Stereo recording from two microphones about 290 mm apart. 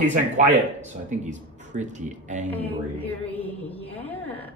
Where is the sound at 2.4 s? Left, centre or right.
Centre.